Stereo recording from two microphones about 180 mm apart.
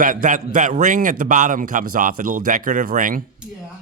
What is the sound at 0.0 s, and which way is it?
A man's voice, 50° right (ahead or behind).